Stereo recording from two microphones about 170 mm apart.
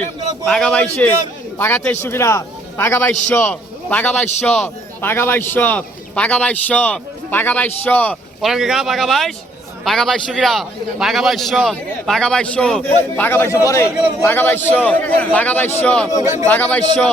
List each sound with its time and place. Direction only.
0.4 s a man's voice: 5° left (ahead or behind)
8.4 s a man's voice: centre (ahead or behind)